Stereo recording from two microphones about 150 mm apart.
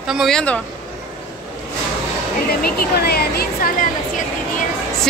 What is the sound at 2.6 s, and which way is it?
Speech, 90° left.